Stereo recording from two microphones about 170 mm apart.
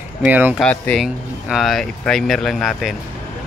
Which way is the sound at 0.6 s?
5° left (ahead or behind).